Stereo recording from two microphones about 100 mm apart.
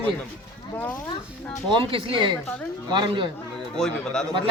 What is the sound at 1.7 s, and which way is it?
Speech, 60° right (ahead or behind).